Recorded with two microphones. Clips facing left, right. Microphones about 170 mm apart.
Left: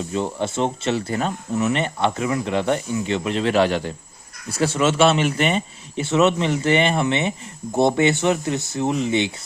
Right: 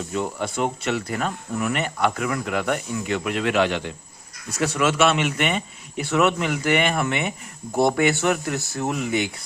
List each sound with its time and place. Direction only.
0.1 s speech: 30° left (ahead or behind)